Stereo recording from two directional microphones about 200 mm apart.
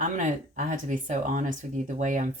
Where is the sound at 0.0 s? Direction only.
40° right (ahead or behind).